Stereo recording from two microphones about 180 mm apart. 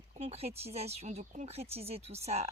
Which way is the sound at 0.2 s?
35° right (ahead or behind).